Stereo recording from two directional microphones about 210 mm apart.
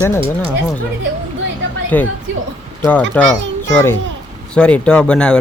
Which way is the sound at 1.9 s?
10° left (ahead or behind).